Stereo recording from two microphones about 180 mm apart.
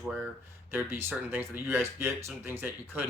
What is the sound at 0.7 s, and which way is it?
Speech, 10° right (ahead or behind).